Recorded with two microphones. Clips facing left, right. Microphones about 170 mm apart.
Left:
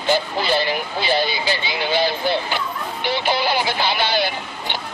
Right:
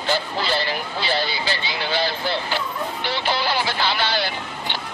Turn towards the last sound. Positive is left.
turn(degrees=15)  # may be behind; listen again after turning